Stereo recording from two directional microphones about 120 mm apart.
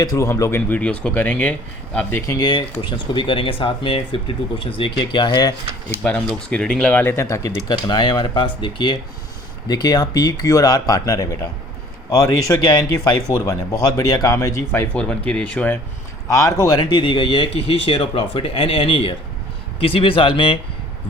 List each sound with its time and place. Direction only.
0.0 s speech: 30° left (ahead or behind)
0.7 s speech: 10° left (ahead or behind)
2.2 s speech: 30° left (ahead or behind)
6.0 s speech: 10° left (ahead or behind)
16.3 s speech: 25° left (ahead or behind)
17.0 s speech: 45° left (ahead or behind)